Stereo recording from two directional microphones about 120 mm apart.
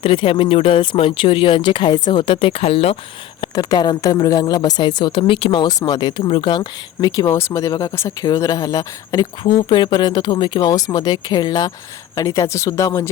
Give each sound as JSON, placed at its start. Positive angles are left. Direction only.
{"t": 0.0, "sound": "speech", "side_deg": 50}
{"t": 3.5, "sound": "speech", "side_deg": 30}
{"t": 5.6, "sound": "speech", "side_deg": 35}
{"t": 7.3, "sound": "speech", "side_deg": 25}
{"t": 7.7, "sound": "speech", "side_deg": 35}